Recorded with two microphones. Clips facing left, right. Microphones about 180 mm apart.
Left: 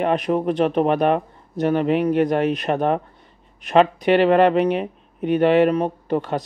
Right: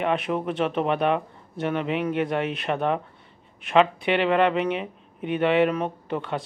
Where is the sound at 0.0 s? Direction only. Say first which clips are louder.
Left 5 dB; 40° left (ahead or behind).